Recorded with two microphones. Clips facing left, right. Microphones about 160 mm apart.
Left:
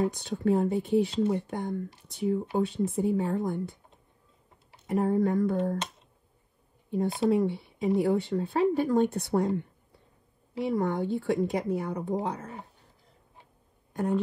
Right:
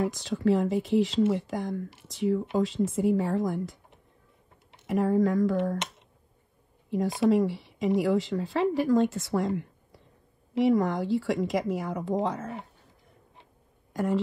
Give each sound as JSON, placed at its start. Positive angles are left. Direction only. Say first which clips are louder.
{"t": 0.0, "sound": "a woman's voice", "louder": "right 1 dB", "side_deg": -85}
{"t": 4.8, "sound": "a woman's voice", "louder": "right 1 dB", "side_deg": -90}
{"t": 6.9, "sound": "a woman's voice", "louder": "right 2 dB", "side_deg": -90}
{"t": 13.9, "sound": "speech", "louder": "right 1 dB", "side_deg": -90}